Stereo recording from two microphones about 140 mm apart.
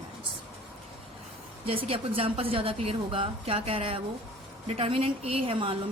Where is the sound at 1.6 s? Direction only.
40° right (ahead or behind).